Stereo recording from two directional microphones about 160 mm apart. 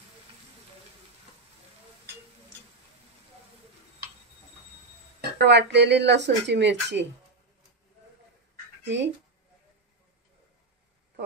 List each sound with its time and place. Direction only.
5.4 s speech: 90° right
8.8 s speech: 90° right